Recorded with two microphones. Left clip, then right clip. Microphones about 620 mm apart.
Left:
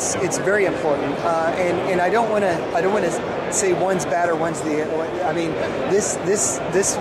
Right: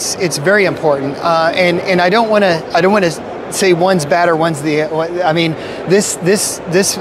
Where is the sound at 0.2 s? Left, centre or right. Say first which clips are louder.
Right 8 dB; right.